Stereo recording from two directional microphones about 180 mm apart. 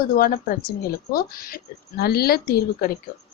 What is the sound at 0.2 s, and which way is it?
Speech, 55° left (ahead or behind).